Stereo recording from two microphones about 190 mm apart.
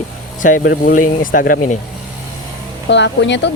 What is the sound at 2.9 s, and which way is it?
Speech, 70° left (ahead or behind).